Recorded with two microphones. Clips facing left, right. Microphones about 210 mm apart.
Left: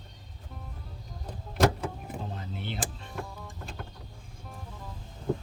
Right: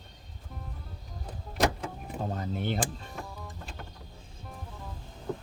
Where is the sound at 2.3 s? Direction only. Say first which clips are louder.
Right 6 dB; 45° right (ahead or behind).